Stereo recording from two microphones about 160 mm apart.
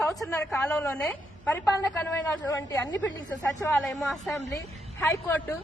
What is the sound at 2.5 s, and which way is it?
A woman's voice, 20° left (ahead or behind).